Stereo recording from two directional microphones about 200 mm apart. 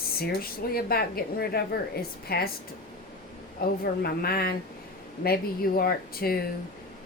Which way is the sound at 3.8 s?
50° left (ahead or behind).